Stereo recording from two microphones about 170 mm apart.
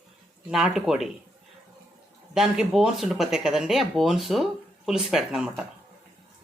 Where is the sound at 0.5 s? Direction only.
5° right (ahead or behind).